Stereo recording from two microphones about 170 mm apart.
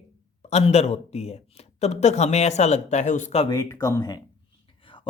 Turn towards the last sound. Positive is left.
turn(degrees=20)  # may be behind; listen again after turning